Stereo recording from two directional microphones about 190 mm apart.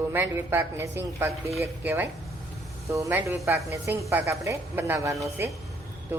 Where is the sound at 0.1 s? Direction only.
10° right (ahead or behind).